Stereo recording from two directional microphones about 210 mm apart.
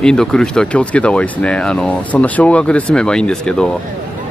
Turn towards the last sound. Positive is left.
turn(degrees=5)  # may be behind; listen again after turning